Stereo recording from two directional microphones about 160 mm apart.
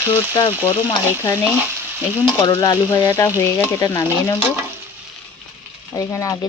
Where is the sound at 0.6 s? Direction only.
20° left (ahead or behind).